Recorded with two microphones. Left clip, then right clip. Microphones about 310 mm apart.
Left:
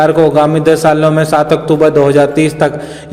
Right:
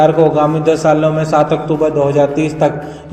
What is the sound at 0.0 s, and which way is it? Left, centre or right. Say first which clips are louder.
A man's voice: left 2 dB; left.